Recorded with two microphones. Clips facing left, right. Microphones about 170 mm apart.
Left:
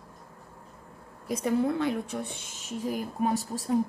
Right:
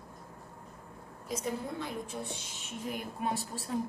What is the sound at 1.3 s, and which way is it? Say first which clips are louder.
A woman's voice: left 9 dB; 70° left (ahead or behind).